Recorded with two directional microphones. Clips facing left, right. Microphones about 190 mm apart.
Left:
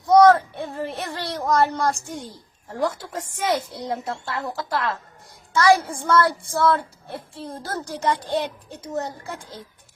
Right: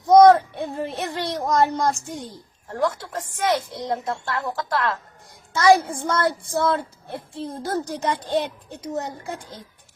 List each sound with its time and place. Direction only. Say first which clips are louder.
0.1 s child singing: right 2 dB; 20° right (ahead or behind)
2.7 s a woman's voice: right 1 dB; 10° left (ahead or behind)
5.5 s a child's voice: right 1 dB; 20° right (ahead or behind)